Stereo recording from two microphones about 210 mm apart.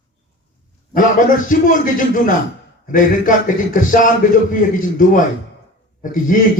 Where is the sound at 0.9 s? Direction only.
40° left (ahead or behind).